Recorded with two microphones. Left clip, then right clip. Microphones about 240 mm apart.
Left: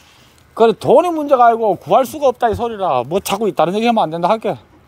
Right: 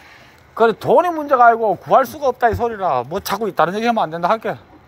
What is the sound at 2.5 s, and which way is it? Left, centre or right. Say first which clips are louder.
Speech: left 1 dB; left.